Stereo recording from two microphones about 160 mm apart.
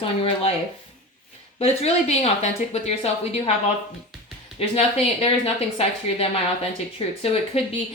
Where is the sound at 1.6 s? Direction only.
40° left (ahead or behind).